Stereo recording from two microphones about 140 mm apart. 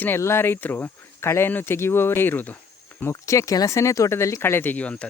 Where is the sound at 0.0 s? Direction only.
15° left (ahead or behind).